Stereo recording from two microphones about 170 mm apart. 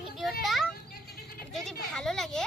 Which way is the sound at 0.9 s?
65° left (ahead or behind).